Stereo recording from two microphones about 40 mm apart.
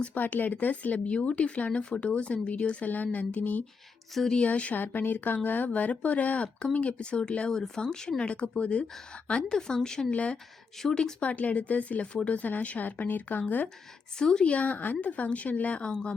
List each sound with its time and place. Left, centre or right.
0.0 s speech: left
4.8 s speech: left; by 8.2 s centre
8.2 s speech: left
9.5 s speech: centre
10.1 s speech: left
10.8 s speech: centre
11.2 s speech: left
14.2 s speech: centre
14.4 s speech: left
15.9 s speech: centre